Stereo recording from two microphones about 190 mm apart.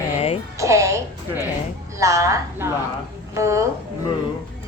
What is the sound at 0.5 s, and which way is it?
Speech, 15° right (ahead or behind).